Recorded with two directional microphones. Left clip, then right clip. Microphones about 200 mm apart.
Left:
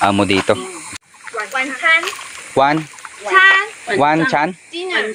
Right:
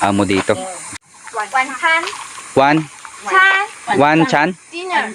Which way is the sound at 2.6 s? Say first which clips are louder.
Right 1 dB; 25° right (ahead or behind).